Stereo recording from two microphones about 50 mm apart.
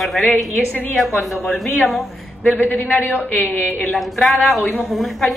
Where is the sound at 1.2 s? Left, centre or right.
Centre.